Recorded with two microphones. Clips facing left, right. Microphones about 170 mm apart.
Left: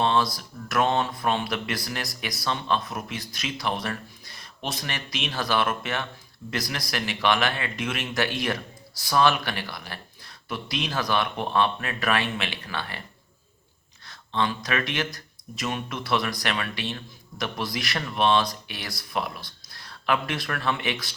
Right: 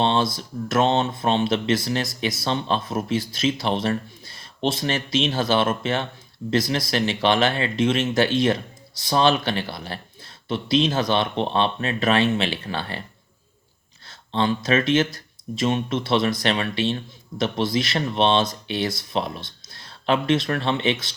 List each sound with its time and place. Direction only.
0.0 s speech: 25° right (ahead or behind)
14.1 s speech: 30° right (ahead or behind)